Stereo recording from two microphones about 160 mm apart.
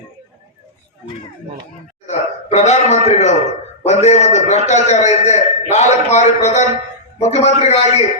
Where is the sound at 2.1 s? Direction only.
45° left (ahead or behind).